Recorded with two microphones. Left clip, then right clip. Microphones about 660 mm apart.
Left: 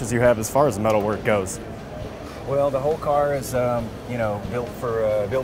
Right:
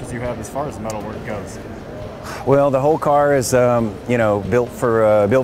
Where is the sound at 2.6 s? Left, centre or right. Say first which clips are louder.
Right 3 dB; right.